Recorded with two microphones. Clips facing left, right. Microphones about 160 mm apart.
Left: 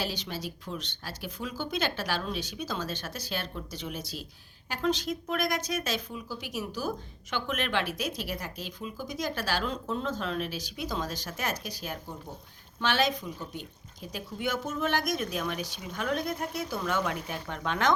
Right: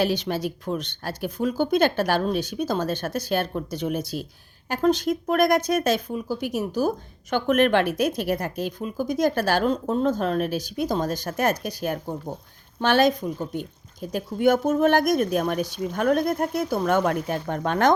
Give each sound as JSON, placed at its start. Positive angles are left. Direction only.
{"t": 0.0, "sound": "speech", "side_deg": -60}